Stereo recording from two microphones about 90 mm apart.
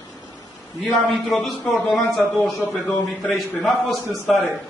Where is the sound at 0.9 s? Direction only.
5° left (ahead or behind).